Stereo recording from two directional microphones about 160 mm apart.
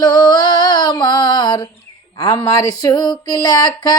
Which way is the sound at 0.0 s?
25° left (ahead or behind).